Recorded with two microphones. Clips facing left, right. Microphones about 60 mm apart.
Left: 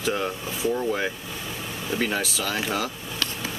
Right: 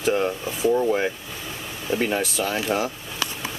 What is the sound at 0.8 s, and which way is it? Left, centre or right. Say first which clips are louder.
Speech: right 4 dB; centre.